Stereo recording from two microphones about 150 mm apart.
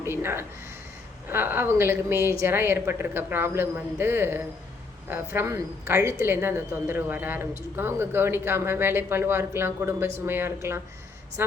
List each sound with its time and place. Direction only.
0.0 s a woman's voice: 15° right (ahead or behind)